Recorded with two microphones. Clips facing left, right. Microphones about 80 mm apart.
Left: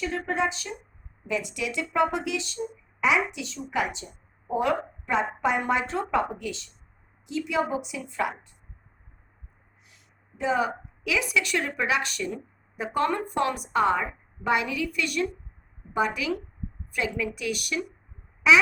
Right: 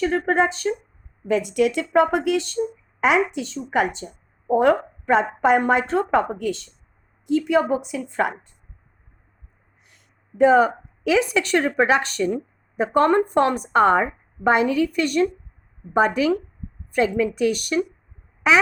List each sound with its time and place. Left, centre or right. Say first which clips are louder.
0.0 s speech: right 7 dB; right
9.9 s a woman's voice: right 10 dB; right